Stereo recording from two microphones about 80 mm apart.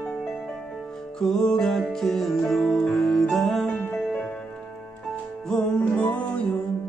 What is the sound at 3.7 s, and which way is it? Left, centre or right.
Music, left.